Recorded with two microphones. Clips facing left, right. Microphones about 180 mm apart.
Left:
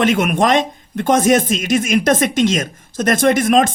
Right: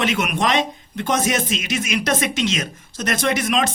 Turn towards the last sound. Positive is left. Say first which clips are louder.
# left 7 dB
turn(degrees=50)  # may be behind; listen again after turning